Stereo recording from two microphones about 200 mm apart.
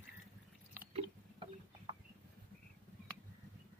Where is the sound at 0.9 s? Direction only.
25° right (ahead or behind).